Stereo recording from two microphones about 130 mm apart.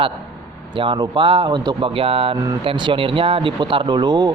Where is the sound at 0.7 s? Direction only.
40° right (ahead or behind).